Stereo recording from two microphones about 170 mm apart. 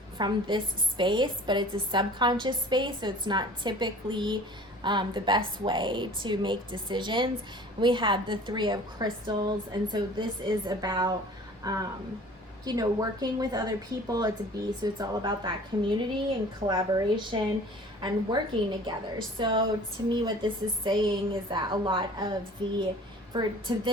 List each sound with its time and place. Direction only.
0.2 s a woman's voice: 25° right (ahead or behind)